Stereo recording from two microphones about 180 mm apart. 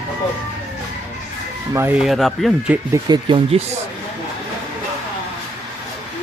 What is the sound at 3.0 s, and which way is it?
Speech, 25° right (ahead or behind).